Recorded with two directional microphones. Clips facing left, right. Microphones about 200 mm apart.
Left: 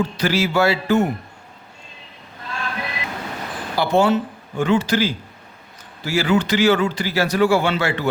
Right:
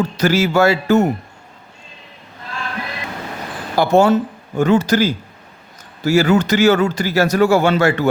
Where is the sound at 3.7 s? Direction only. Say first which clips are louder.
Right 4 dB; 45° right (ahead or behind).